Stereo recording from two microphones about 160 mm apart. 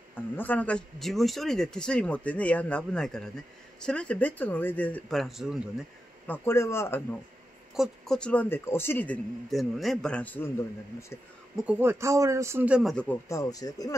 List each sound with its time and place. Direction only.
0.1 s a man's voice: 10° left (ahead or behind)
6.2 s a man's voice: 15° left (ahead or behind)
7.7 s a man's voice: centre (ahead or behind)
11.5 s a man's voice: 10° right (ahead or behind)
13.3 s speech: 20° left (ahead or behind)